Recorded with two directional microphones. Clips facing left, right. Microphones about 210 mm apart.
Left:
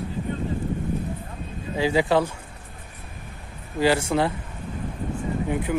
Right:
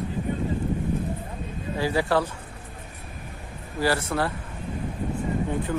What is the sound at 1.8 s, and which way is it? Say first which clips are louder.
Speech: left 3 dB; 15° left (ahead or behind).